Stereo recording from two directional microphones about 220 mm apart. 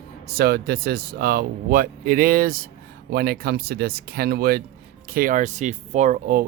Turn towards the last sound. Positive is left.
turn(degrees=-35)  # may be behind; listen again after turning